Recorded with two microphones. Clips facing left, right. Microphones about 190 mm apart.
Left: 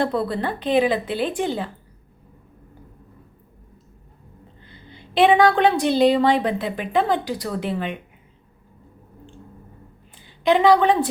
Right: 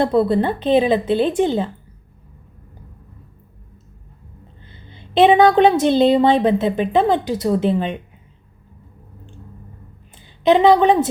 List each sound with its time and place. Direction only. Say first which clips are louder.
0.0 s a woman's voice: right 6 dB; 20° right (ahead or behind)
4.6 s a woman's voice: even; 20° right (ahead or behind)
10.2 s a woman's voice: right 4 dB; 20° right (ahead or behind)